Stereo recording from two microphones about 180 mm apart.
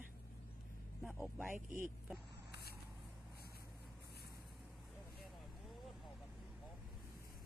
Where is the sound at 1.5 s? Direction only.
45° right (ahead or behind).